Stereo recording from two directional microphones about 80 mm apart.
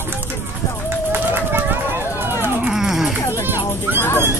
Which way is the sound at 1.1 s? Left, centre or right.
Right.